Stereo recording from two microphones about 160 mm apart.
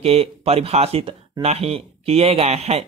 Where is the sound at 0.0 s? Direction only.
40° right (ahead or behind).